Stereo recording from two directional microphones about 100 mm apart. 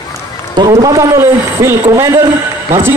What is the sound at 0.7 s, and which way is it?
A man's voice, 35° right (ahead or behind).